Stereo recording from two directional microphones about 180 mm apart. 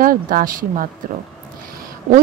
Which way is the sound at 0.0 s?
50° right (ahead or behind).